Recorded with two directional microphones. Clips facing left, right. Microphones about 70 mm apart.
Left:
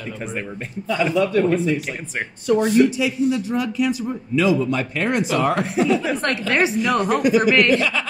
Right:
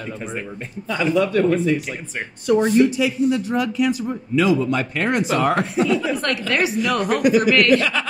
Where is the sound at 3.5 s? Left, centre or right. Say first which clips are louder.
Right 1 dB; right.